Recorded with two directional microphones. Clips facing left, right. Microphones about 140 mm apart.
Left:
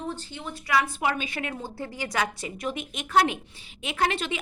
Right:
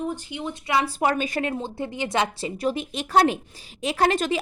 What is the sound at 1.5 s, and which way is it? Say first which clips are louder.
Speech: right 6 dB; 20° right (ahead or behind).